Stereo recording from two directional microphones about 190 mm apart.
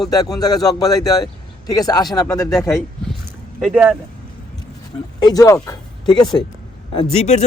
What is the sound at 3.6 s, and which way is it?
Speech, 5° right (ahead or behind).